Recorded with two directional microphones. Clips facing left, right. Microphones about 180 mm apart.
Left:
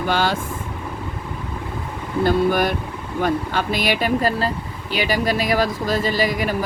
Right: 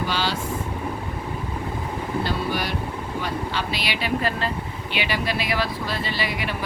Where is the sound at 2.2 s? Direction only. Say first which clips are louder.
Left 13 dB; 50° left (ahead or behind).